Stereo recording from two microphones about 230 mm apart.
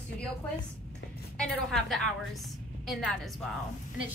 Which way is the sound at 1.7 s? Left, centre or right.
Centre.